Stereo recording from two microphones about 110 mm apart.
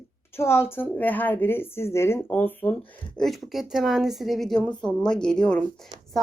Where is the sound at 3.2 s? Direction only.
Centre (ahead or behind).